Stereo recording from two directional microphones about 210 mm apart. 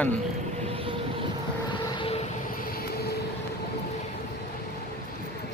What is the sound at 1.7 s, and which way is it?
Vehicle, 20° left (ahead or behind).